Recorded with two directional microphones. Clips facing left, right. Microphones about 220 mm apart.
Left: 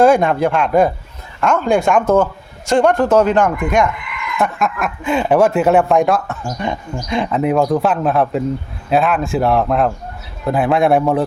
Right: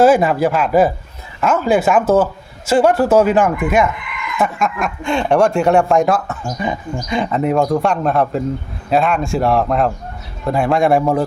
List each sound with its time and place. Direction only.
0.0 s speech: 5° right (ahead or behind)